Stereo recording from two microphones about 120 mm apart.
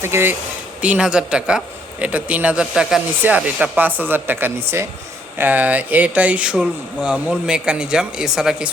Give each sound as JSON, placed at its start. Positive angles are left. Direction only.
{"t": 0.0, "sound": "speech", "side_deg": -20}
{"t": 0.8, "sound": "speech", "side_deg": -10}